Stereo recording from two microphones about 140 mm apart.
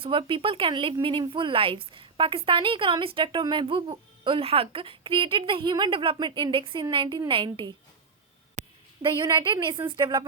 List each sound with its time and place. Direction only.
0.0 s a woman's voice: 40° right (ahead or behind)
8.6 s a sound: 60° right (ahead or behind)
9.0 s a woman's voice: 35° right (ahead or behind)